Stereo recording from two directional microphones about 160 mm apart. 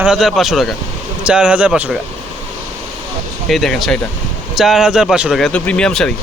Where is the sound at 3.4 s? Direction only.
Centre (ahead or behind).